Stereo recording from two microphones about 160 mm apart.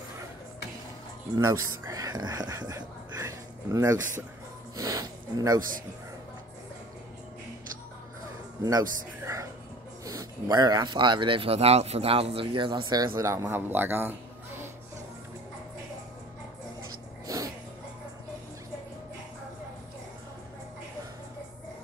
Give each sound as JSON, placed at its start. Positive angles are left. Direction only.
{"t": 1.3, "sound": "speech", "side_deg": -20}
{"t": 8.6, "sound": "speech", "side_deg": -20}